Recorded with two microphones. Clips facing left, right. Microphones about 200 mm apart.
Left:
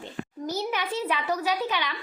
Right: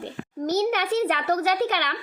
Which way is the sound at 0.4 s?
80° right.